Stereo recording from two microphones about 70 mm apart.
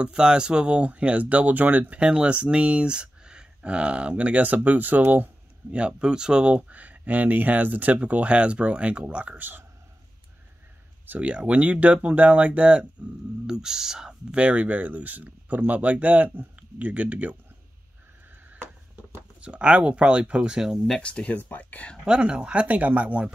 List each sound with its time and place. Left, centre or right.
0.0 s speech: centre
5.7 s speech: centre
11.1 s speech: centre
19.4 s speech: centre
21.0 s speech: centre
22.0 s speech: centre